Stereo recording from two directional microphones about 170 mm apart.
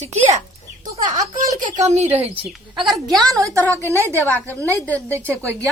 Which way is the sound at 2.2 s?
35° right (ahead or behind).